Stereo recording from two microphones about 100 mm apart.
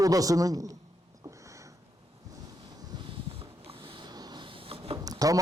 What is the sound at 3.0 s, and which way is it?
Boat, 60° right (ahead or behind).